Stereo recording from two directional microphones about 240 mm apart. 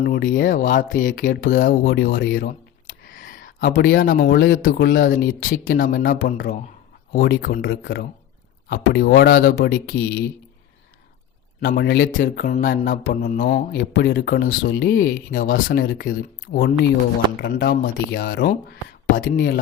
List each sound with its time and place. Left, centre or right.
0.0 s speech: left
11.6 s speech: left